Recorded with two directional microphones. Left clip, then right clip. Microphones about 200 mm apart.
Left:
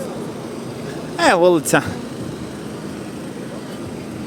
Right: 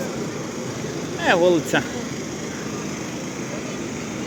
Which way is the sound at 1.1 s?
40° left (ahead or behind).